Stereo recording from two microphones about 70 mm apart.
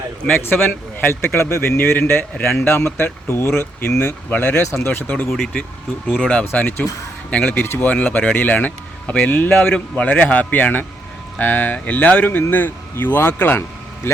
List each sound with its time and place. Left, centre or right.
0.3 s speech: left
4.0 s speech: left
4.5 s speech: left
5.3 s speech: centre; by 14.1 s left